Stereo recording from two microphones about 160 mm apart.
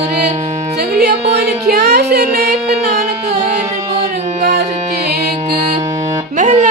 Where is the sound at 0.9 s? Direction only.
90° right.